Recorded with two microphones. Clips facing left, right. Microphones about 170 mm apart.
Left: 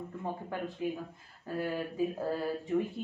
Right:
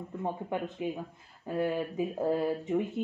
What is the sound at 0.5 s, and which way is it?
Speech, 20° right (ahead or behind).